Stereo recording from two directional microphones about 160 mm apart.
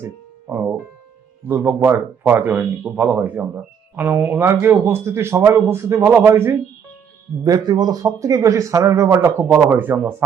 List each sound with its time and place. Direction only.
0.0 s speech: 10° right (ahead or behind)